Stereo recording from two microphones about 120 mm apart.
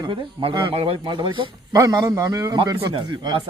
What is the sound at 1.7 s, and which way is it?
A man's voice, 30° right (ahead or behind).